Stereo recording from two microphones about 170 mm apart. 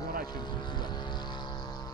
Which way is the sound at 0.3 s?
25° left (ahead or behind).